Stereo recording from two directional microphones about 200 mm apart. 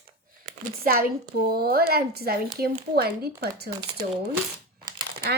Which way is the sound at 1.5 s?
50° right (ahead or behind).